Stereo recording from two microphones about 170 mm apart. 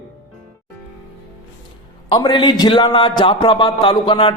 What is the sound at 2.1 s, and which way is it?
A man's voice, 25° left (ahead or behind).